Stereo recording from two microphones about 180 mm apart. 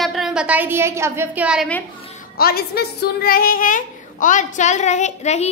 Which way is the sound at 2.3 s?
60° left (ahead or behind).